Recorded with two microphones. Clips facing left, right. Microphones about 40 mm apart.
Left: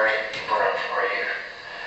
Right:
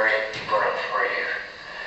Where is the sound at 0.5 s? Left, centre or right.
Centre.